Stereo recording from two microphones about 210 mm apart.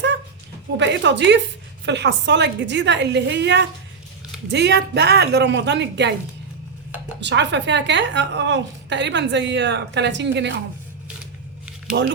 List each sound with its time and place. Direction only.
0.8 s a woman's voice: 60° right (ahead or behind)
7.2 s a woman's voice: 55° right (ahead or behind)
11.9 s speech: 50° right (ahead or behind)